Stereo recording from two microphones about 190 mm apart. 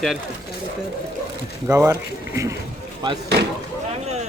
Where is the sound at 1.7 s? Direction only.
15° right (ahead or behind).